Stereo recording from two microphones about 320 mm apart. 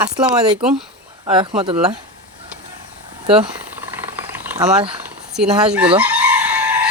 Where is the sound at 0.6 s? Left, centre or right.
Centre.